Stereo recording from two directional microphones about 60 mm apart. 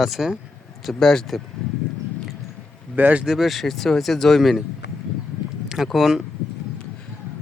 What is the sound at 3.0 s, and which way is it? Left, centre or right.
Speech, right.